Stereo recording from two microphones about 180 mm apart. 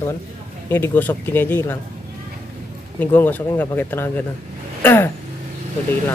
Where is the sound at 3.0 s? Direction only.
10° left (ahead or behind).